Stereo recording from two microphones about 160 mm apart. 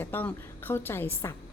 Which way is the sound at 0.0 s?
10° left (ahead or behind).